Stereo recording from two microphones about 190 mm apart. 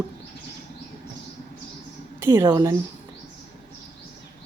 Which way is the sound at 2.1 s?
15° right (ahead or behind).